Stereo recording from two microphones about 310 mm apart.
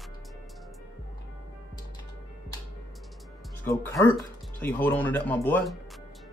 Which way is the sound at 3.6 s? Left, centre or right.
Centre.